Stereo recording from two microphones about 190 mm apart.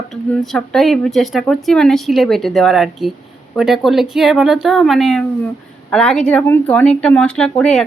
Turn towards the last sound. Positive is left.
turn(degrees=5)  # may be behind; listen again after turning